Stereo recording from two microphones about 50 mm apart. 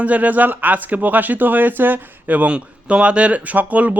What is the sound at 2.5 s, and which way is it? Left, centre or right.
Speech, right.